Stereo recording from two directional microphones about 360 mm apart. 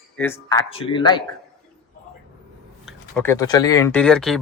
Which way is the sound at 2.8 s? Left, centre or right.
Centre.